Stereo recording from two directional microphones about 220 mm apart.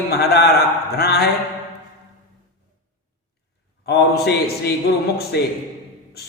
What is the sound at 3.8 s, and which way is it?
Mantra, 50° left (ahead or behind).